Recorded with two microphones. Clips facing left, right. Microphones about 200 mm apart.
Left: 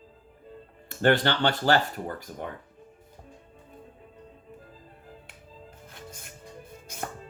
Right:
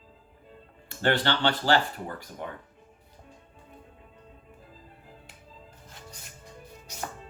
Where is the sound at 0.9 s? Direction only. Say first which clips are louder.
Left 3 dB; 45° left (ahead or behind).